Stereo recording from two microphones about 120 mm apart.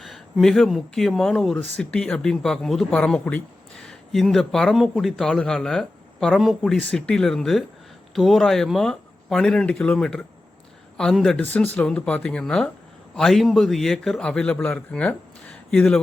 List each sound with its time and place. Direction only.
0.0 s speech: centre (ahead or behind)